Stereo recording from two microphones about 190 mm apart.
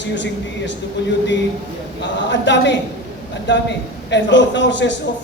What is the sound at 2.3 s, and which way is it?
A man's voice, 70° left (ahead or behind).